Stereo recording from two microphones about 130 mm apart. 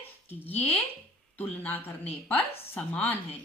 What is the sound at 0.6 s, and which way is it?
A woman's voice, 10° left (ahead or behind).